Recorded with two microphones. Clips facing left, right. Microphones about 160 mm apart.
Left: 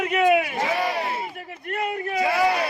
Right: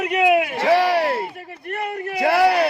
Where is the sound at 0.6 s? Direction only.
75° right (ahead or behind).